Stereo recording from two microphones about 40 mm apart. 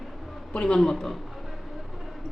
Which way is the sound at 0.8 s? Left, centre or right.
Centre.